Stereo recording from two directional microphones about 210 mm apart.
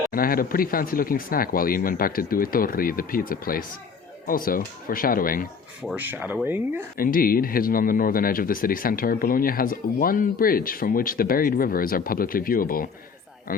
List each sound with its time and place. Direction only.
0.1 s speech: 45° left (ahead or behind)
5.8 s speech: 5° right (ahead or behind)
6.9 s speech: 45° left (ahead or behind)